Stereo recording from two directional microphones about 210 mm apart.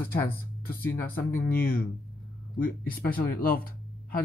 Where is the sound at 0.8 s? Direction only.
10° left (ahead or behind).